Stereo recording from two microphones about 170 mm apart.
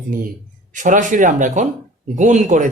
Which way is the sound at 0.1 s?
55° right (ahead or behind).